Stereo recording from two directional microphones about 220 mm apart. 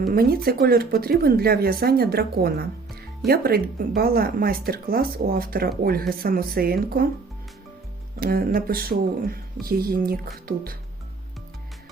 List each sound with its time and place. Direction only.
0.0 s a woman's voice: 45° right (ahead or behind)
8.2 s speech: 40° right (ahead or behind)